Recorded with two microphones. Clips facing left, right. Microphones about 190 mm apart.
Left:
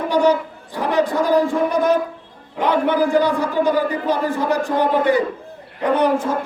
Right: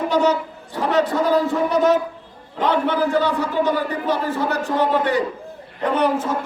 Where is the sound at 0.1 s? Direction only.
10° left (ahead or behind).